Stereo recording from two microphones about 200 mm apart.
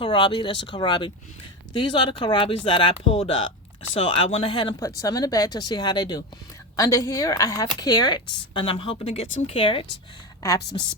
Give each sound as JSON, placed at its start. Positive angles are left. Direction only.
{"t": 0.0, "sound": "speech", "side_deg": 25}